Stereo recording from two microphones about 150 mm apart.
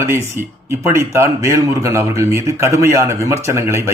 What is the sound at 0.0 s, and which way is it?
Speech, 15° right (ahead or behind).